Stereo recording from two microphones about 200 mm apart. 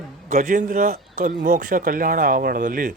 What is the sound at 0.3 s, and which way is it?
A man's voice, 40° right (ahead or behind).